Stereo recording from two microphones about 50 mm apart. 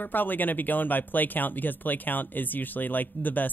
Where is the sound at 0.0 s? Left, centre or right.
Left.